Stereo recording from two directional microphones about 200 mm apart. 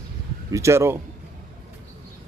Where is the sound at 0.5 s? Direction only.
15° right (ahead or behind).